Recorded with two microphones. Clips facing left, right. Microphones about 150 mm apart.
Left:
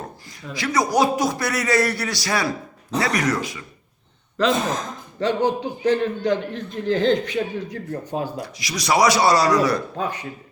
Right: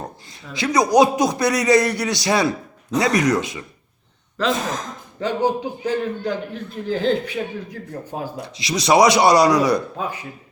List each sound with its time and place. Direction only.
0.5 s a man's voice: 20° right (ahead or behind)
5.2 s a man's voice: 10° right (ahead or behind)
8.5 s a man's voice: 25° right (ahead or behind)